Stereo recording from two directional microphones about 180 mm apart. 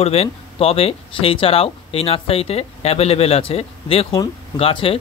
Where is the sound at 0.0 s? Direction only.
35° left (ahead or behind).